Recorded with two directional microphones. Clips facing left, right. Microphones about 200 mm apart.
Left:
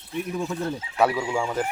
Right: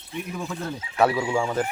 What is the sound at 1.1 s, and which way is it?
Speech, 10° right (ahead or behind).